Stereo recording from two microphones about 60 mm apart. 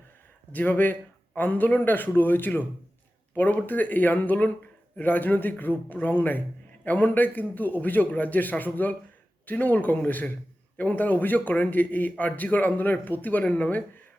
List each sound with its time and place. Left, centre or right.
0.5 s a man's voice: left